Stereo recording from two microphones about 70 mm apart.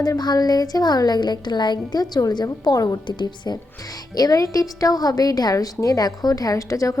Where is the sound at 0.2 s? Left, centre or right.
Left.